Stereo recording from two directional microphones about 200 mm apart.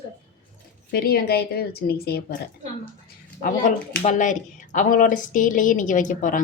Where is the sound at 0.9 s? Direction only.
50° left (ahead or behind).